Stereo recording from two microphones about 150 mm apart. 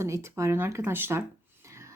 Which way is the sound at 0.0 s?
20° right (ahead or behind).